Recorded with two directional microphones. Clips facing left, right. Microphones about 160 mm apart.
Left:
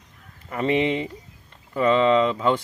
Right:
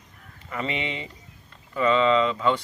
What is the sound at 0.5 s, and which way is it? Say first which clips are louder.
Speech: left 8 dB; 40° left (ahead or behind).